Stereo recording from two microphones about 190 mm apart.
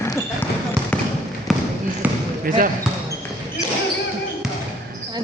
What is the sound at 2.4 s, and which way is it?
Speech, 45° right (ahead or behind).